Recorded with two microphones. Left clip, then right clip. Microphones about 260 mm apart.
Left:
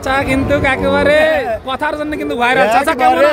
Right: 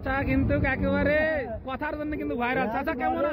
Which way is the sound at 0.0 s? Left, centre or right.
Centre.